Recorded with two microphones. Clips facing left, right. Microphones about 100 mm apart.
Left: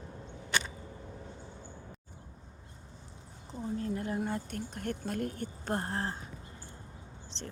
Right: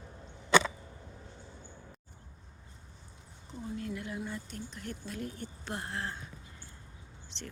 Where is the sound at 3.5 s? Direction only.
35° left (ahead or behind).